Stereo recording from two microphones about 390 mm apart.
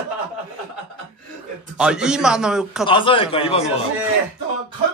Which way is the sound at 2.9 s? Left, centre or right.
Centre.